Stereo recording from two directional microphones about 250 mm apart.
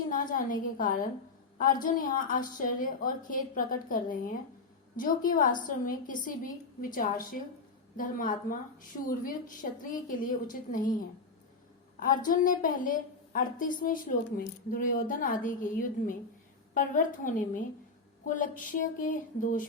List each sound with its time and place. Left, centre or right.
0.1 s a woman's voice: left
11.9 s a woman's voice: left